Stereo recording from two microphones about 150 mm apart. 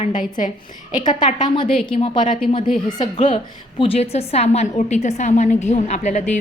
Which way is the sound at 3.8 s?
40° left (ahead or behind).